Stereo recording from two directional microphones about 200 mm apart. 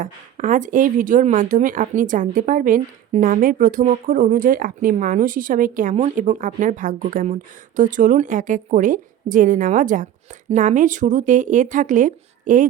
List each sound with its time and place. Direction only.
0.0 s speech: 40° right (ahead or behind)